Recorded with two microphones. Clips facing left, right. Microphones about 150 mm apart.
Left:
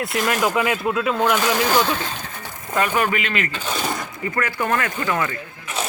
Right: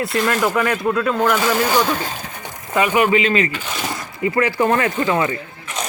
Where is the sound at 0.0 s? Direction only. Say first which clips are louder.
Right 2 dB; centre (ahead or behind).